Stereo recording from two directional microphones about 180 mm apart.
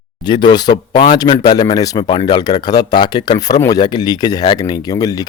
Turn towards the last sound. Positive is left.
turn(degrees=20)  # may be behind; listen again after turning